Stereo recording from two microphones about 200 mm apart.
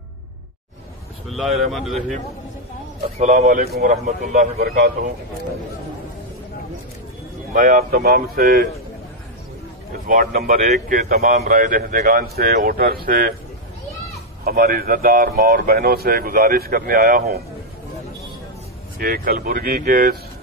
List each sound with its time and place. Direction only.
1.3 s speech: centre (ahead or behind)
3.2 s a man's voice: 35° right (ahead or behind); by 4.9 s 50° right (ahead or behind)
7.5 s a man's voice: 45° right (ahead or behind)
10.0 s a man's voice: 45° right (ahead or behind)
14.4 s a man's voice: 50° right (ahead or behind)
18.9 s a man's voice: 45° right (ahead or behind)